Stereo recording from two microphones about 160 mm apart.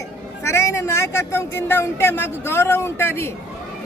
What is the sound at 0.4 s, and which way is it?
A man's voice, 15° left (ahead or behind).